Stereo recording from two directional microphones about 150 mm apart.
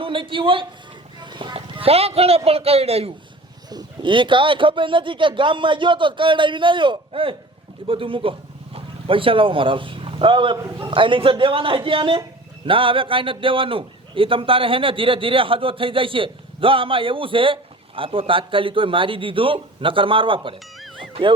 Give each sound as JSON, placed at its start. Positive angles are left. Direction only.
{"t": 0.0, "sound": "a man's voice", "side_deg": -35}
{"t": 3.7, "sound": "a man's voice", "side_deg": -30}